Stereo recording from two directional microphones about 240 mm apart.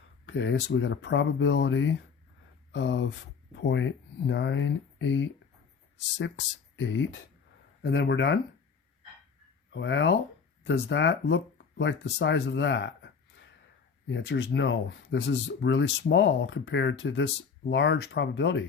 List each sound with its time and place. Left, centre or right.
0.3 s speech: left
9.7 s speech: left